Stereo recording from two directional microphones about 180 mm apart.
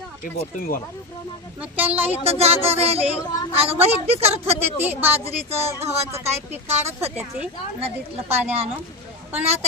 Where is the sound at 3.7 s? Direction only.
35° right (ahead or behind).